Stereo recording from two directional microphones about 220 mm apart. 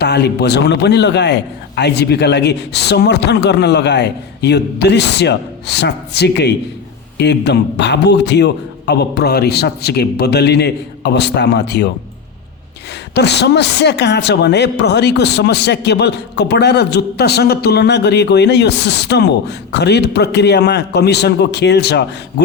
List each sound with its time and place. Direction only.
0.0 s speech: 50° left (ahead or behind)
13.1 s speech: 50° left (ahead or behind)